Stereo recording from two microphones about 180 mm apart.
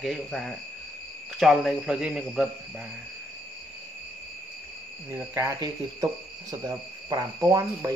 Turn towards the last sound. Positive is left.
turn(degrees=-20)  # may be behind; listen again after turning